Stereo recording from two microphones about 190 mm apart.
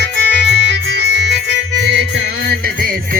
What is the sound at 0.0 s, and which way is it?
Music, 65° right (ahead or behind).